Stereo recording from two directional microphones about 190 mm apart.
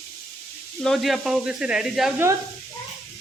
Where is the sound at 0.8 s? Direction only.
Centre (ahead or behind).